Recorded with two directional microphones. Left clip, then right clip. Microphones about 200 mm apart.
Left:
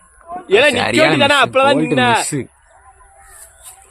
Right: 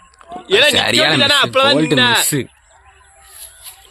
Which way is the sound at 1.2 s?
40° left (ahead or behind).